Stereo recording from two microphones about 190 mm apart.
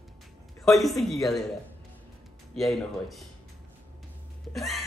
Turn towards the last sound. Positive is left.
turn(degrees=0)  # may be behind; listen again after turning